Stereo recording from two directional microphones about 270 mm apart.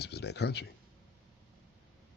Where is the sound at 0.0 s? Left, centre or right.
Left.